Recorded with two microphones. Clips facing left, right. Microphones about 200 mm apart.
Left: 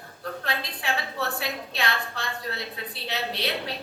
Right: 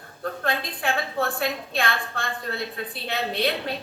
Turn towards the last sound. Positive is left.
turn(degrees=-50)  # may be behind; listen again after turning